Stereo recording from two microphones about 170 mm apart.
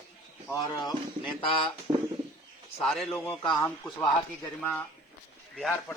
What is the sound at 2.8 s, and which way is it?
Speech, 5° left (ahead or behind).